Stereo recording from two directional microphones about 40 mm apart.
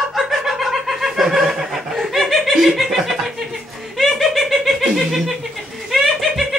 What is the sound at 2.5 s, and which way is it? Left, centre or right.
Chuckle, centre.